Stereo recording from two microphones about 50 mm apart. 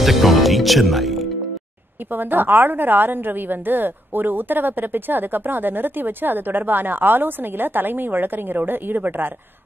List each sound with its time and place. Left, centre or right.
0.0 s music: centre
2.1 s a woman's voice: right